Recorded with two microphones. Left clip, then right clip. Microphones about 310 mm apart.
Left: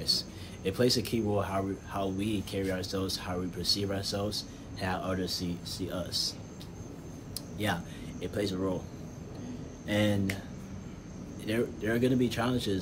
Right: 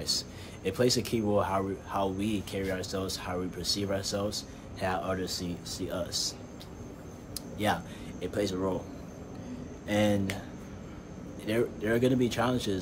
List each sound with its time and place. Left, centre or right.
0.7 s speech: centre
7.5 s speech: centre
9.8 s speech: centre
11.4 s speech: centre